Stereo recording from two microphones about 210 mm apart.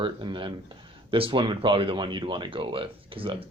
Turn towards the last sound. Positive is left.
turn(degrees=-25)  # may be behind; listen again after turning